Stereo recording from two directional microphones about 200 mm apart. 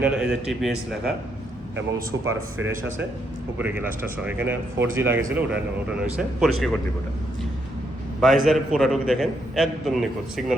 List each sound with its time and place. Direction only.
0.0 s a man's voice: 5° right (ahead or behind)
2.1 s speech: 75° right (ahead or behind)
3.6 s a man's voice: 10° right (ahead or behind)
8.2 s a man's voice: centre (ahead or behind)